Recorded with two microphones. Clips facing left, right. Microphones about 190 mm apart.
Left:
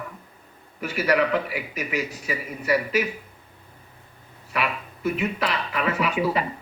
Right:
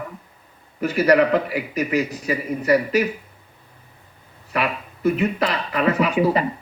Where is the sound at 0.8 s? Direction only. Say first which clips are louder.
Right 6 dB; 40° right (ahead or behind).